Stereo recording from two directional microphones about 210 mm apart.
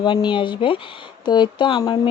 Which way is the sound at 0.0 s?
20° left (ahead or behind).